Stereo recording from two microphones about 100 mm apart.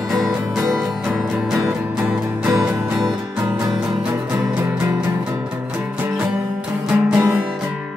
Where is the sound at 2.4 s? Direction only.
5° right (ahead or behind).